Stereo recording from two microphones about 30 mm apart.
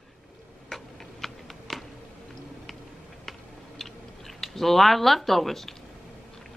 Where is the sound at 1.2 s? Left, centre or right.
Centre.